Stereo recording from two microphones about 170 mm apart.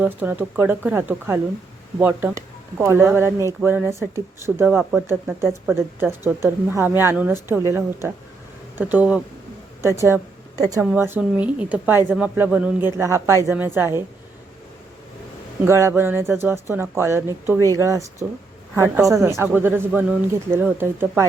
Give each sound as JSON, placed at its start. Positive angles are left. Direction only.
{"t": 0.0, "sound": "speech", "side_deg": -10}
{"t": 4.9, "sound": "speech", "side_deg": -15}
{"t": 10.7, "sound": "speech", "side_deg": -10}
{"t": 15.6, "sound": "speech", "side_deg": -15}